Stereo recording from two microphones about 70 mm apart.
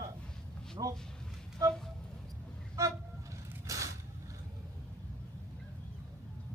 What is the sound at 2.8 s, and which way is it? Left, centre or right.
Vehicle, right.